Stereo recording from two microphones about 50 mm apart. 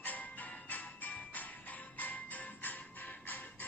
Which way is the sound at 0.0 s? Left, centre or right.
Left.